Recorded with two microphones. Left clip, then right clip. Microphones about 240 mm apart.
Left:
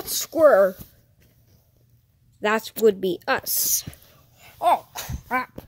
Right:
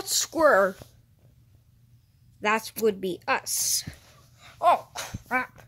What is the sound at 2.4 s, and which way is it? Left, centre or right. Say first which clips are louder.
Speech: left 5 dB; centre.